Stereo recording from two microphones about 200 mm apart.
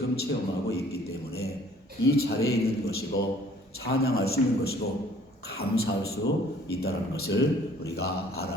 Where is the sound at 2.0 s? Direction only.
50° left (ahead or behind).